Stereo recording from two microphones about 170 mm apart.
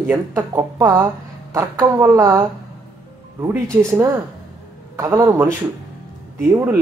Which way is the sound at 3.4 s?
15° right (ahead or behind).